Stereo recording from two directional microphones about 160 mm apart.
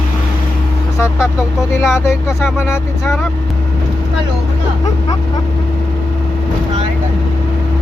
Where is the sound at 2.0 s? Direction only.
15° left (ahead or behind).